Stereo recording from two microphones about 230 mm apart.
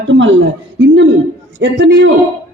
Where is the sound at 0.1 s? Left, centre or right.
Right.